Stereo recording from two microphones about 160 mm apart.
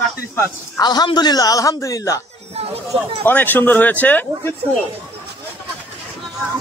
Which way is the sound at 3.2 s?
10° left (ahead or behind).